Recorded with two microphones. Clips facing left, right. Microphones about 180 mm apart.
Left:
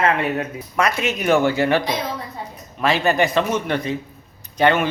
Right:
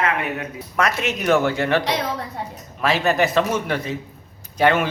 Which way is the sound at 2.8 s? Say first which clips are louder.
Left 1 dB; centre (ahead or behind).